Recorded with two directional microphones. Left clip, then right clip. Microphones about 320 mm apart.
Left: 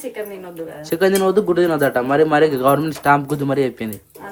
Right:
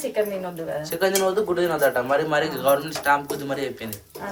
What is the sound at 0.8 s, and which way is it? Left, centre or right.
A man's voice, left.